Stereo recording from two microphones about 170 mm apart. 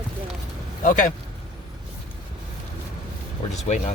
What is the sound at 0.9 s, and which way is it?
Speech, 50° left (ahead or behind).